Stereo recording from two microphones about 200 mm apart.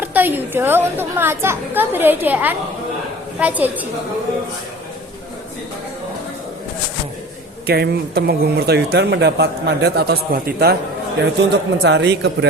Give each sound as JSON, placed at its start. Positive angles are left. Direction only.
{"t": 0.0, "sound": "a woman's voice", "side_deg": -10}
{"t": 7.7, "sound": "speech", "side_deg": -50}
{"t": 11.5, "sound": "speech", "side_deg": -60}